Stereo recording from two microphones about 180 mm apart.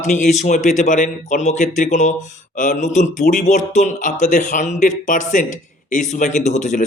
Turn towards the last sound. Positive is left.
turn(degrees=45)  # may be behind; listen again after turning